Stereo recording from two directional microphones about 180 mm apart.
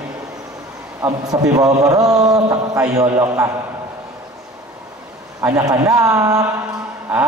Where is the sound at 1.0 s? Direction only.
20° right (ahead or behind).